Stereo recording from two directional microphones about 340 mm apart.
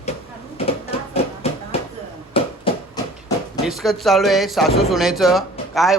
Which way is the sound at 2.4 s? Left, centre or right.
Centre.